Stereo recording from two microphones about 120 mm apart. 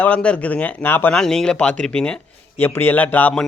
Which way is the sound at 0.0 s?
10° left (ahead or behind).